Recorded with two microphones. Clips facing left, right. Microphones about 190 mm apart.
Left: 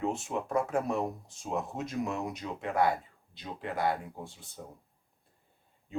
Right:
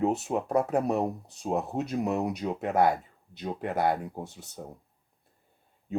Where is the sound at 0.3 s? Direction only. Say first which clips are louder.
Right 4 dB; 40° right (ahead or behind).